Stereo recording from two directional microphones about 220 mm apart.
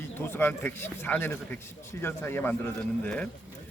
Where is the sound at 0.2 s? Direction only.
10° left (ahead or behind).